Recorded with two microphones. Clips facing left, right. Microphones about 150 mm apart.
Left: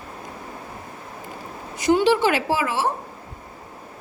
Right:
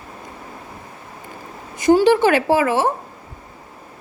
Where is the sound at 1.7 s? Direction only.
45° right (ahead or behind).